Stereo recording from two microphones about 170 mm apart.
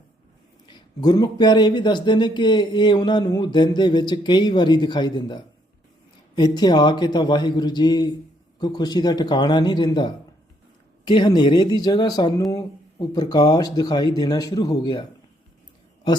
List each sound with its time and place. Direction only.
0.7 s speech: 25° left (ahead or behind)